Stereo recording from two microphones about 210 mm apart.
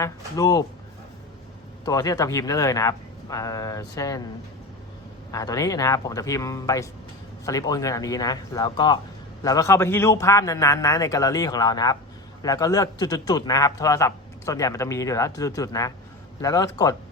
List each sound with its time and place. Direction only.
0.3 s a man's voice: 20° left (ahead or behind)
1.8 s a man's voice: 15° left (ahead or behind)
5.3 s a man's voice: 15° left (ahead or behind)